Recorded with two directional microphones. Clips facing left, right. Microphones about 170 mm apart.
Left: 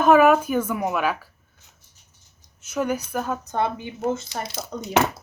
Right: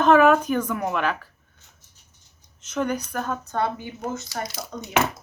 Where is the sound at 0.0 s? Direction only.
10° left (ahead or behind).